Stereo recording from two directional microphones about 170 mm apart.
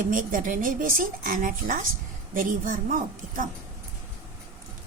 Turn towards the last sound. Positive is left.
turn(degrees=-50)  # may be behind; listen again after turning